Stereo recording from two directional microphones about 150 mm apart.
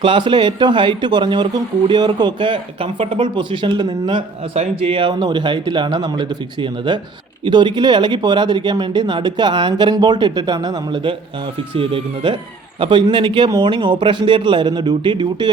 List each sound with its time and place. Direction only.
0.0 s speech: 30° right (ahead or behind)
4.5 s speech: 45° right (ahead or behind)